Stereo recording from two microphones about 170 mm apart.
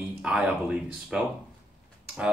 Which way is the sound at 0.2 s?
5° right (ahead or behind).